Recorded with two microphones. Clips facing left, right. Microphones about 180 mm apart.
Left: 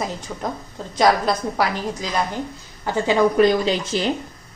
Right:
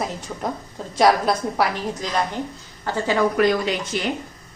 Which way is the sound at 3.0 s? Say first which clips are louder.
Left 3 dB; 25° left (ahead or behind).